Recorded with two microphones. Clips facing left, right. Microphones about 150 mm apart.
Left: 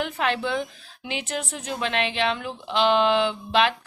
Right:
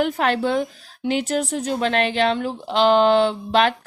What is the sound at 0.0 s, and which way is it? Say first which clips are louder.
Speech: right 6 dB; 45° right (ahead or behind).